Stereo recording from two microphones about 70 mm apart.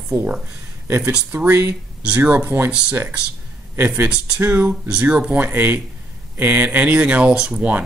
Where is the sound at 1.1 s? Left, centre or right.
Right.